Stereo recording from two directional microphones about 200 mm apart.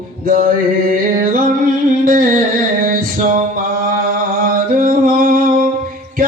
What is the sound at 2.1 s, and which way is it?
Music, 45° right (ahead or behind).